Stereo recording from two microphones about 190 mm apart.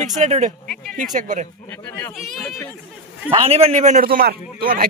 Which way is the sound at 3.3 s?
30° right (ahead or behind).